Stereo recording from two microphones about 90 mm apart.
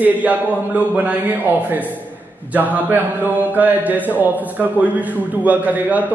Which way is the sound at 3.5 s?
20° right (ahead or behind).